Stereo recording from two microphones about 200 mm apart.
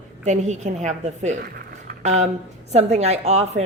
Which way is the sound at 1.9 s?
35° right (ahead or behind).